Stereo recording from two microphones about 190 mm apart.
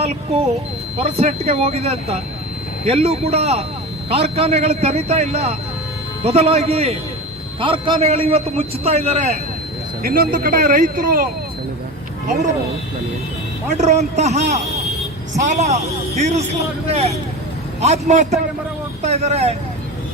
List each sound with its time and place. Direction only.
0.9 s a man's voice: 35° right (ahead or behind)
10.0 s speech: 50° right (ahead or behind)
13.7 s a man's voice: 35° right (ahead or behind)